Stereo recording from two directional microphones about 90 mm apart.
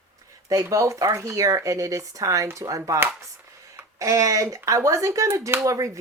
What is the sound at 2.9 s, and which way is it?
Speech, 25° right (ahead or behind).